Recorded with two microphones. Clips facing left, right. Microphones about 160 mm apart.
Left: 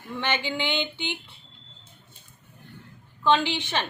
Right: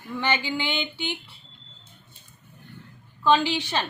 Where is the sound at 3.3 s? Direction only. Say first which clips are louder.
Right 1 dB; 20° left (ahead or behind).